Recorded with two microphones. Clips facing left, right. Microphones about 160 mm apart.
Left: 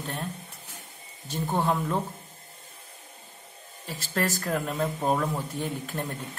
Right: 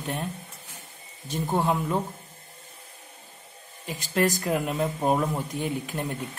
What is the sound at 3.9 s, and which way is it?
Speech, 15° right (ahead or behind).